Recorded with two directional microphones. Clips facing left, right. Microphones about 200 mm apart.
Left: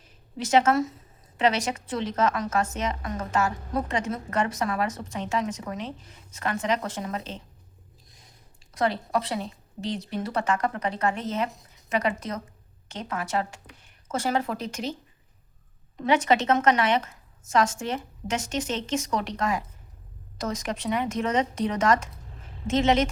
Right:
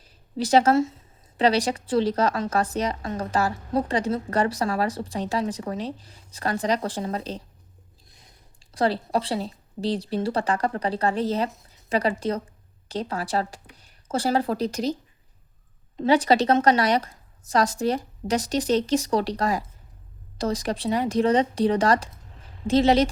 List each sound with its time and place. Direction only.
0.3 s a woman's voice: 35° right (ahead or behind)
8.7 s a woman's voice: 30° right (ahead or behind)
16.0 s a woman's voice: 35° right (ahead or behind)